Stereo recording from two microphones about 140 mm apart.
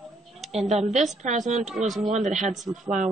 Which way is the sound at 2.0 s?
55° right (ahead or behind).